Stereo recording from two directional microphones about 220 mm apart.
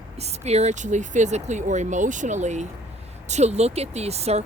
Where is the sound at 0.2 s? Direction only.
30° right (ahead or behind).